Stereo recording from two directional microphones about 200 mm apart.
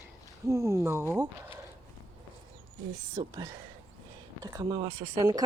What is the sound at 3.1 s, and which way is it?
Speech, 20° right (ahead or behind).